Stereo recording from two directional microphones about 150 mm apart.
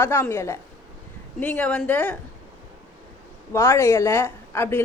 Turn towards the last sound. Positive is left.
turn(degrees=15)  # may be behind; listen again after turning